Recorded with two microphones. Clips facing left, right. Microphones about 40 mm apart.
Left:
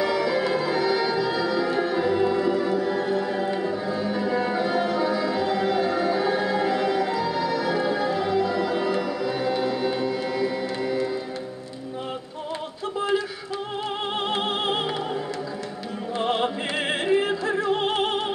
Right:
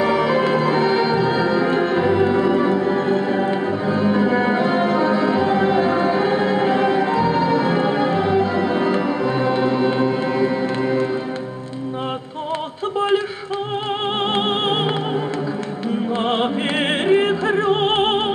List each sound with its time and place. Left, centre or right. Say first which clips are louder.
0.0 s music: right 6 dB; right
16.2 s opera: right 2 dB; right
17.1 s music: right 6 dB; right